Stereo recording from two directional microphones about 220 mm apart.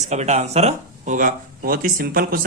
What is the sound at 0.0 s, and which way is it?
Speech, 30° right (ahead or behind).